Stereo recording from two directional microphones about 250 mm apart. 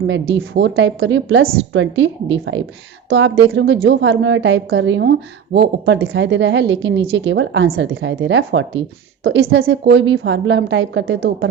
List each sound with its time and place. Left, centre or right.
0.3 s a woman's voice: right